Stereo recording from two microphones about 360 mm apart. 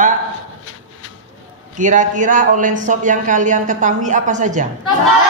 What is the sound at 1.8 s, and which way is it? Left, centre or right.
Speech, right.